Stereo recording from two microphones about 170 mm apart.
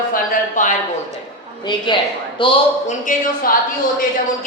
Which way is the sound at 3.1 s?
50° left (ahead or behind).